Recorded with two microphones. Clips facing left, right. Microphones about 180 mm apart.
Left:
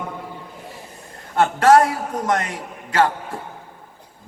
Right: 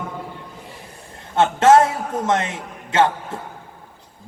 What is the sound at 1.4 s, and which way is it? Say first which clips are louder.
A man's voice: right 1 dB; 25° right (ahead or behind).